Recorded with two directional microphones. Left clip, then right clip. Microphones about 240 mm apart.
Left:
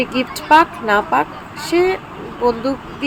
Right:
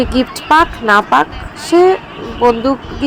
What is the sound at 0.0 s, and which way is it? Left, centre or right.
Speech, centre.